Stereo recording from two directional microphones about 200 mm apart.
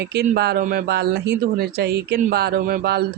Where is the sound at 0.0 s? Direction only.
55° right (ahead or behind).